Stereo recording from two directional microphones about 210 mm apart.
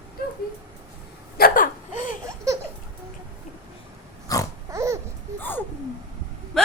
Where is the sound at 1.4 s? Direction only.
40° left (ahead or behind).